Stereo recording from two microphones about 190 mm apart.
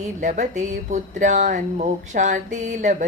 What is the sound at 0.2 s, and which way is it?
Speech, 40° right (ahead or behind).